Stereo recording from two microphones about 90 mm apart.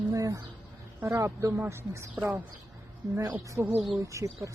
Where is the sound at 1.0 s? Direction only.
25° right (ahead or behind).